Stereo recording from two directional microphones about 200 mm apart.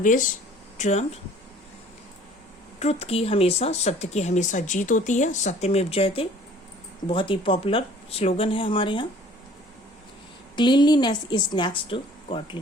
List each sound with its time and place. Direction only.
0.0 s speech: 40° left (ahead or behind)
2.7 s a woman's voice: 30° left (ahead or behind)
10.5 s a woman's voice: 25° left (ahead or behind)